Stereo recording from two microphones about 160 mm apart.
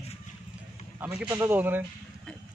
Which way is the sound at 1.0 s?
5° right (ahead or behind).